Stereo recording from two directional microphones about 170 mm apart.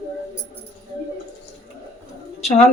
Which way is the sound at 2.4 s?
40° left (ahead or behind).